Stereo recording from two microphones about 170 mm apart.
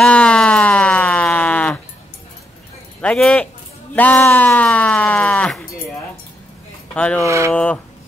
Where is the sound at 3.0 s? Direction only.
5° left (ahead or behind).